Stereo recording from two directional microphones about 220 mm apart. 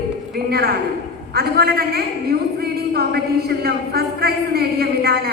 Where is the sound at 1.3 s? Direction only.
45° right (ahead or behind).